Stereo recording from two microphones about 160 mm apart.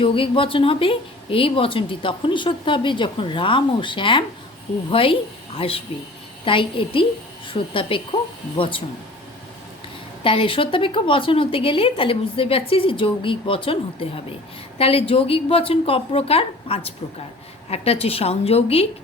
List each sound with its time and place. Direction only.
0.0 s a woman's voice: 35° left (ahead or behind)
10.2 s speech: 35° left (ahead or behind)